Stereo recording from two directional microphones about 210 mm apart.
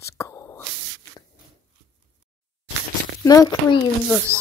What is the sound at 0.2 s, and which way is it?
Whispering, 15° left (ahead or behind).